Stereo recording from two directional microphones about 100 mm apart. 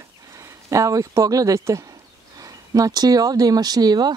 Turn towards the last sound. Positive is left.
turn(degrees=-40)  # may be behind; listen again after turning